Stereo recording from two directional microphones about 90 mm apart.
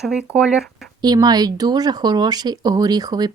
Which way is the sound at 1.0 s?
50° right (ahead or behind).